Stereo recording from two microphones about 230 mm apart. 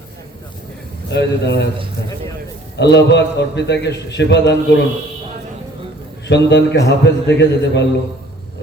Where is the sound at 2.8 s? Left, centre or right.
Left.